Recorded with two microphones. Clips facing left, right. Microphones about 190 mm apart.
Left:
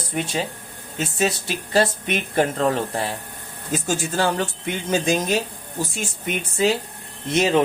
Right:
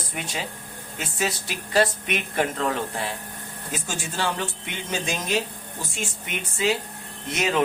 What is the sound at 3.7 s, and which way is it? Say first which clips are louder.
Speech: left 8 dB; 40° left (ahead or behind).